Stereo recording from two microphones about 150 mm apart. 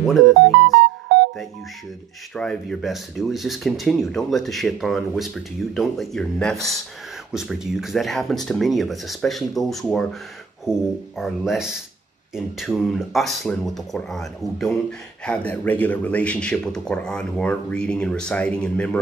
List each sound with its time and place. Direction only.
0.0 s speech: centre (ahead or behind)
1.0 s music: 90° right
2.3 s speech: 5° left (ahead or behind)